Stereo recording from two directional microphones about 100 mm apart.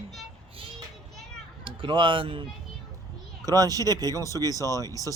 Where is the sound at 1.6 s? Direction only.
60° right (ahead or behind).